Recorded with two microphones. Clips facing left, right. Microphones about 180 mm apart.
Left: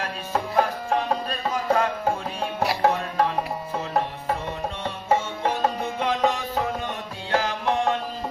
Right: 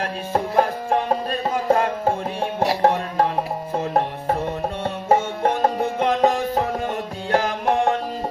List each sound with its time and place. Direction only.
0.3 s music: 35° right (ahead or behind)
5.0 s music: 45° right (ahead or behind)